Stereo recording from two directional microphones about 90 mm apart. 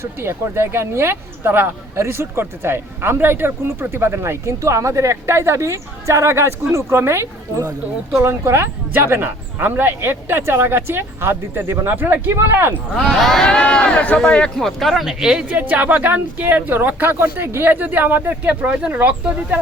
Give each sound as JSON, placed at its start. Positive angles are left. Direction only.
{"t": 0.0, "sound": "speech", "side_deg": -25}
{"t": 13.0, "sound": "speech", "side_deg": 5}